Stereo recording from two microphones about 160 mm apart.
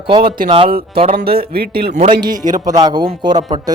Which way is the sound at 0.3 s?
60° right (ahead or behind).